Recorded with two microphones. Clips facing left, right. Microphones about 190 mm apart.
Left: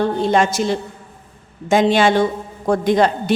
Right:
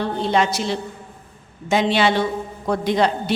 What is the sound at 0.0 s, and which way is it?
A woman's voice, 45° left (ahead or behind).